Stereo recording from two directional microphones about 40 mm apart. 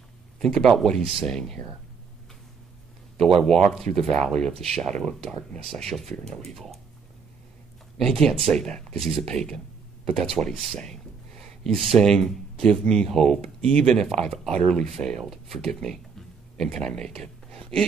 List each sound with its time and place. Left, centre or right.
0.4 s speech: centre
3.2 s speech: centre
8.0 s speech: centre
11.3 s a sound: centre
12.0 s speech: centre
15.2 s speech: centre
16.8 s speech: centre